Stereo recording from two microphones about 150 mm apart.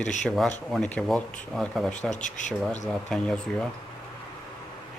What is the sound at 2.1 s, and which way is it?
Speech, 55° left (ahead or behind).